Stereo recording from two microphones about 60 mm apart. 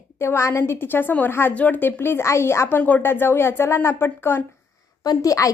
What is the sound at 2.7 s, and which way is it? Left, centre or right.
Speech, left.